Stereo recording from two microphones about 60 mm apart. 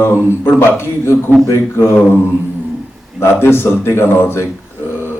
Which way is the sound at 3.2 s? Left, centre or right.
Left.